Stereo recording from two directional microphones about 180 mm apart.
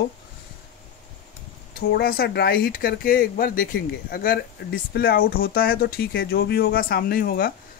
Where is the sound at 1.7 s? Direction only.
60° left (ahead or behind).